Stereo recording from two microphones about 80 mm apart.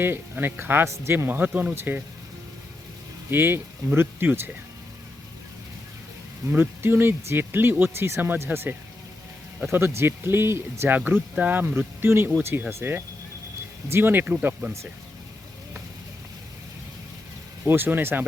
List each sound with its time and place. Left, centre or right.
0.0 s speech: right
3.2 s speech: right
6.5 s speech: right
9.7 s speech: right
13.9 s speech: right
17.7 s speech: right